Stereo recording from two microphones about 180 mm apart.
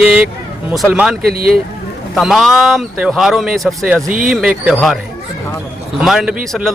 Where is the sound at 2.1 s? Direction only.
Centre (ahead or behind).